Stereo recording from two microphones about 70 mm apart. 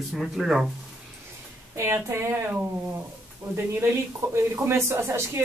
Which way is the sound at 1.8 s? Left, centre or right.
Right.